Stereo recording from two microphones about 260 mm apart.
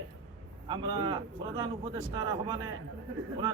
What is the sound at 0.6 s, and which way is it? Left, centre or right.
Speech, centre.